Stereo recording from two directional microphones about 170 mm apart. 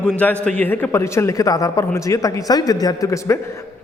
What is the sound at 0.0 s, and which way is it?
A man's voice, 10° left (ahead or behind).